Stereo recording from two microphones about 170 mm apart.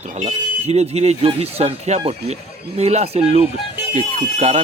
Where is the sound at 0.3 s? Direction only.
40° right (ahead or behind).